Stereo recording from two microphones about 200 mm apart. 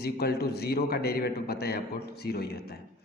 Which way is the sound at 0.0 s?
50° left (ahead or behind).